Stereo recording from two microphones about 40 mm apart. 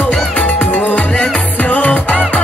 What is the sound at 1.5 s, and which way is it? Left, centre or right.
Music, left.